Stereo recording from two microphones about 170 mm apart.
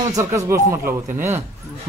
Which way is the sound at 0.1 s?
20° right (ahead or behind).